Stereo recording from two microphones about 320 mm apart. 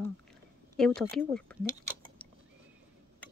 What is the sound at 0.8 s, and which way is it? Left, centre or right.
Speech, centre.